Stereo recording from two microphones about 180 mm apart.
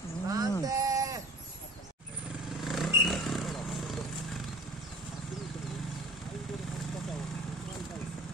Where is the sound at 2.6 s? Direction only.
Centre (ahead or behind).